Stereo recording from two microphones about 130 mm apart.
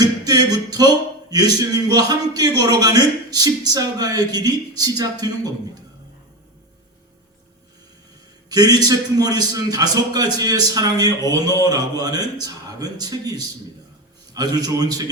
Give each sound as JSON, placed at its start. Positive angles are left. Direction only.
{"t": 0.0, "sound": "a sound", "side_deg": -30}
{"t": 1.3, "sound": "a man's voice", "side_deg": -30}
{"t": 8.4, "sound": "a man's voice", "side_deg": -30}